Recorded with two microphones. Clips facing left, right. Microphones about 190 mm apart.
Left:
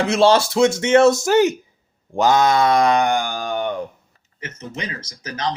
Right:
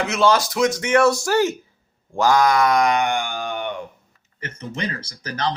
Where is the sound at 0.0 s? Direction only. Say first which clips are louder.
Left 4 dB; 30° left (ahead or behind).